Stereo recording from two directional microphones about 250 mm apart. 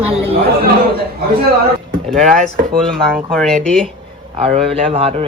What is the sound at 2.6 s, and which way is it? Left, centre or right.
Speech, centre.